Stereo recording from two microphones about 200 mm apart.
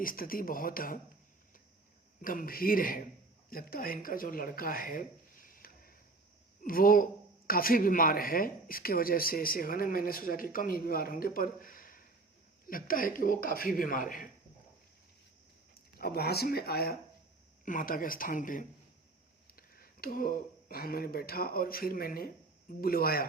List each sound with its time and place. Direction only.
0.0 s speech: 45° left (ahead or behind)
2.2 s speech: 45° left (ahead or behind)
16.0 s speech: 50° left (ahead or behind)